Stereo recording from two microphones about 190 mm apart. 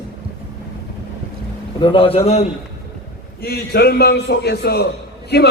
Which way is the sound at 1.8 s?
25° left (ahead or behind).